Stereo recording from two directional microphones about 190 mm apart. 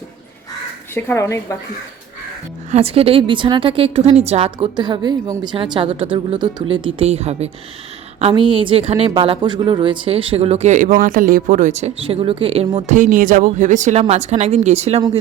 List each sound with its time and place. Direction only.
0.9 s a woman's voice: 15° left (ahead or behind)
2.7 s a woman's voice: 30° right (ahead or behind)